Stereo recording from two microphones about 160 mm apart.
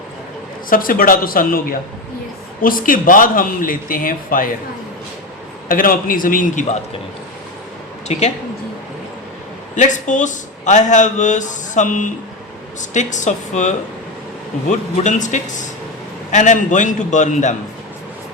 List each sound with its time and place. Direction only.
0.7 s speech: 60° left (ahead or behind)
2.6 s speech: 60° left (ahead or behind)
5.6 s speech: 60° left (ahead or behind)
8.0 s speech: 45° left (ahead or behind)
9.7 s speech: 50° left (ahead or behind)